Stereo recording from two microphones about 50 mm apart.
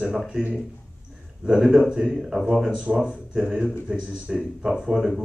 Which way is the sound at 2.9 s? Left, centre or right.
Centre.